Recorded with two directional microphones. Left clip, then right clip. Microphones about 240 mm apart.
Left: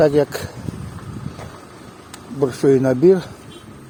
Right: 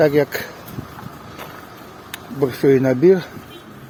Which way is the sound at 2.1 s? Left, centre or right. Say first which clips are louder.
Even; centre.